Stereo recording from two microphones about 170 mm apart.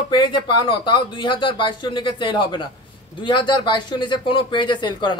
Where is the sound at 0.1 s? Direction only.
30° left (ahead or behind).